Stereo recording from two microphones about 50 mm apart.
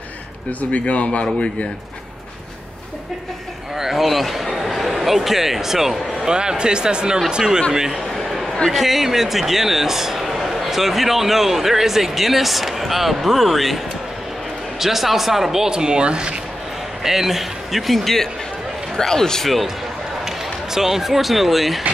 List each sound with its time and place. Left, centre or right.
0.5 s speech: left
3.7 s a man's voice: centre
6.3 s speech: centre
7.7 s a sound: centre
8.6 s speech: centre
14.8 s speech: centre
17.0 s speech: centre
20.2 s speech: centre